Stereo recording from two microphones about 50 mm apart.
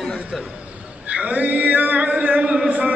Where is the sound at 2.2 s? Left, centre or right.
Right.